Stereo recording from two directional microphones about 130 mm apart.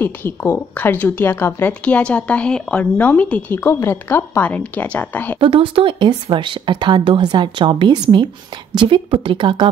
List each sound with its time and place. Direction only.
0.0 s speech: 15° left (ahead or behind)
5.4 s speech: 40° right (ahead or behind)